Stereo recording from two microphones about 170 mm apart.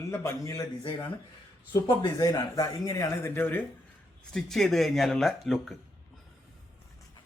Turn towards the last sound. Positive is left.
turn(degrees=0)  # may be behind; listen again after turning